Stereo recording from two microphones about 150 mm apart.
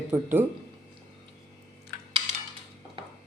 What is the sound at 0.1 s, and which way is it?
Speech, 15° right (ahead or behind).